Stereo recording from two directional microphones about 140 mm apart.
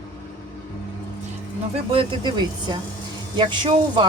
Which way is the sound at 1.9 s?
30° right (ahead or behind).